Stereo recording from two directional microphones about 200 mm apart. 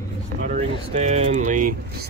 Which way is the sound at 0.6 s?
35° right (ahead or behind).